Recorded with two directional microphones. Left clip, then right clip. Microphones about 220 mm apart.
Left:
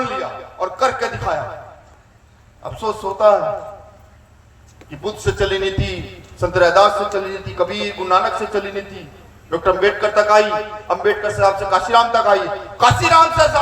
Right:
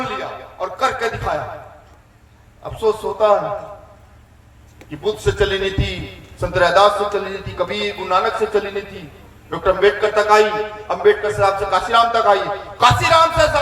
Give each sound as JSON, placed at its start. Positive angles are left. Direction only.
{"t": 0.0, "sound": "a sound", "side_deg": 15}
{"t": 2.6, "sound": "a man's voice", "side_deg": 15}
{"t": 4.9, "sound": "a man's voice", "side_deg": 15}